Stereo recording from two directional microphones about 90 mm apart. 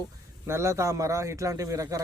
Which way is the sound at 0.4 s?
30° right (ahead or behind).